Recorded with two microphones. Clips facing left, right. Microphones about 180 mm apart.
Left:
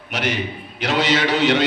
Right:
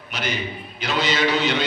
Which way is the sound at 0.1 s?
85° left.